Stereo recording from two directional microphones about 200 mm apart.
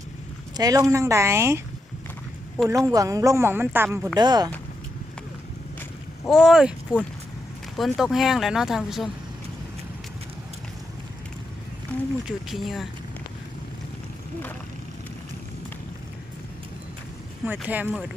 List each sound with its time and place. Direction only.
0.5 s speech: 20° right (ahead or behind)
2.6 s speech: 15° right (ahead or behind)
4.2 s speech: 20° right (ahead or behind)
6.2 s speech: centre (ahead or behind)
11.9 s a sound: 5° left (ahead or behind)
12.5 s speech: centre (ahead or behind)
17.4 s speech: 10° right (ahead or behind)